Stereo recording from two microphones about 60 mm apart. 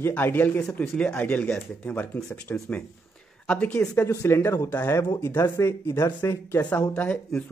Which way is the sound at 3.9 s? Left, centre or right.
Left.